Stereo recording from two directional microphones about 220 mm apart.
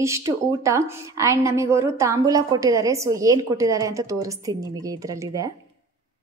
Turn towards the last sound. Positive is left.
turn(degrees=-15)  # may be behind; listen again after turning